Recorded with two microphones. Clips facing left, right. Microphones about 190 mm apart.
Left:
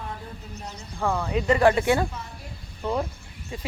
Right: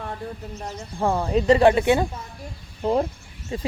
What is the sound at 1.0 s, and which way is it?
Speech, 30° right (ahead or behind).